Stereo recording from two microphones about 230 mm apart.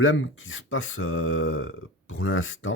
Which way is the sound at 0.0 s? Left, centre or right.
Left.